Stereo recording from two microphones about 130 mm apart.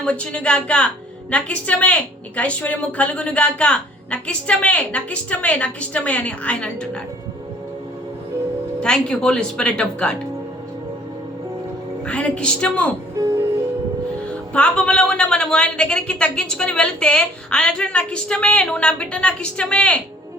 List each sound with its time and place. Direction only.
0.0 s a woman's voice: 10° left (ahead or behind)
8.8 s a woman's voice: 5° left (ahead or behind)
12.0 s a woman's voice: 10° left (ahead or behind)
13.1 s music: 30° right (ahead or behind)
14.5 s a woman's voice: 10° left (ahead or behind)